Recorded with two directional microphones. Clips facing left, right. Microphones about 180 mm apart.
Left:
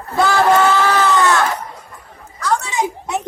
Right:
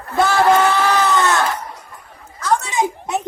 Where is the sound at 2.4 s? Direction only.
20° right (ahead or behind).